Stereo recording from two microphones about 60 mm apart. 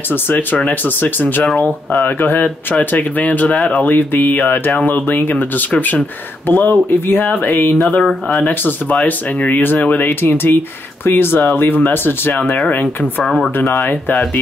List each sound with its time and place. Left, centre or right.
0.1 s speech: left
8.0 s speech: centre
8.4 s speech: left
13.2 s speech: centre